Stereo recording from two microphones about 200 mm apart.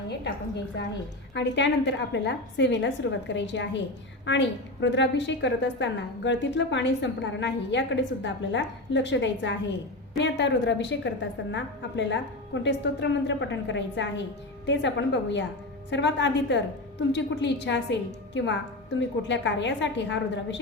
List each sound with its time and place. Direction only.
0.3 s a woman's voice: 60° left (ahead or behind)